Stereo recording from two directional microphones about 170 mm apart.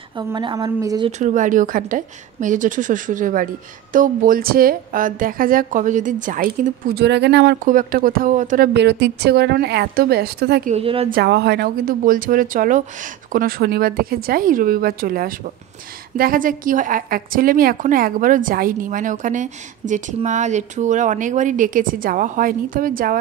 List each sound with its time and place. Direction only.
0.2 s a woman's voice: 25° right (ahead or behind)
1.2 s a woman's voice: 50° right (ahead or behind); by 7.5 s 90° right
7.6 s a woman's voice: 55° right (ahead or behind)
8.7 s a woman's voice: 85° right; by 10.7 s 70° right (ahead or behind)
10.7 s speech: 35° right (ahead or behind)
11.1 s a woman's voice: 70° right (ahead or behind)